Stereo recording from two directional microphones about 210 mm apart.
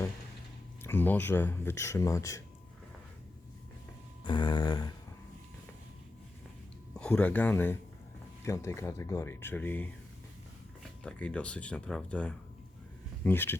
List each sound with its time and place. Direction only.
0.9 s speech: 10° left (ahead or behind)
4.2 s a sound: 20° left (ahead or behind)
6.9 s speech: 5° left (ahead or behind)
11.0 s speech: 5° left (ahead or behind)